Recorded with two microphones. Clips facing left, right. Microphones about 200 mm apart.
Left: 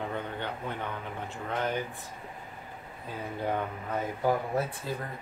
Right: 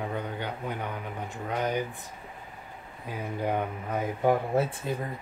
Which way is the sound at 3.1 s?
15° right (ahead or behind).